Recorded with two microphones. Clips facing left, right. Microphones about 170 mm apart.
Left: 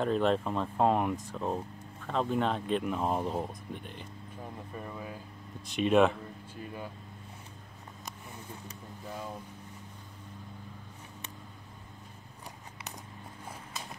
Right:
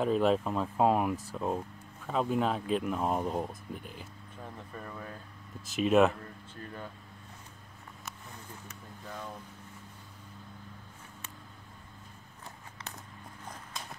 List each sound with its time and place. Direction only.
0.0 s speech: 5° right (ahead or behind)
4.4 s speech: 15° left (ahead or behind)
5.7 s speech: centre (ahead or behind)
6.2 s speech: 10° left (ahead or behind)
9.0 s speech: 15° left (ahead or behind)